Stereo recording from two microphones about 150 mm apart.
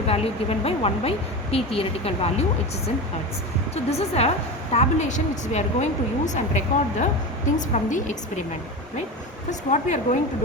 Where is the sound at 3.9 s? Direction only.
45° left (ahead or behind); by 7.9 s 60° left (ahead or behind).